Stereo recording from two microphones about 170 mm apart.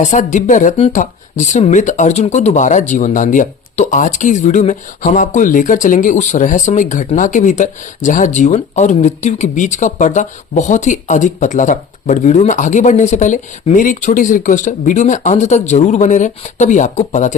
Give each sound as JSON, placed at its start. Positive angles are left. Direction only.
{"t": 0.0, "sound": "speech", "side_deg": 45}